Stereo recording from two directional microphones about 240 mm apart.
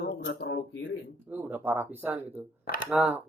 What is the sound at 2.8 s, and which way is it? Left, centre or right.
Speech, centre.